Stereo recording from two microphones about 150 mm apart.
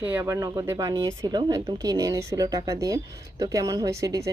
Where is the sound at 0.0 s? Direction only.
15° right (ahead or behind).